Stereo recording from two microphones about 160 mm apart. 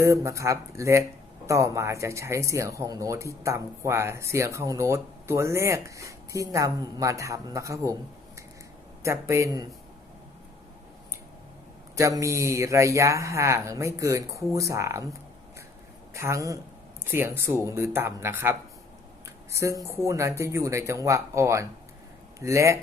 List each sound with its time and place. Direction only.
0.0 s speech: 20° right (ahead or behind)
9.0 s speech: 20° right (ahead or behind)
11.9 s speech: 20° right (ahead or behind)
16.1 s speech: 15° right (ahead or behind)